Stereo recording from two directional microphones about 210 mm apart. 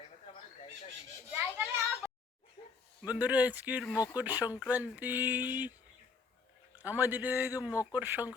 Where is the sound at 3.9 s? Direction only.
15° left (ahead or behind).